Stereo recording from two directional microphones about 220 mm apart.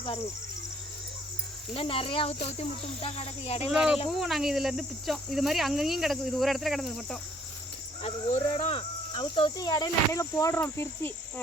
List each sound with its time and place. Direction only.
1.7 s speech: 25° left (ahead or behind)
3.7 s cricket: centre (ahead or behind)
8.0 s cricket: 30° left (ahead or behind); by 11.1 s 10° left (ahead or behind)